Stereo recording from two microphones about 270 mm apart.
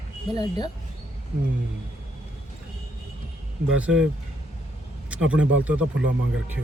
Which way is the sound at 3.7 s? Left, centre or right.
Centre.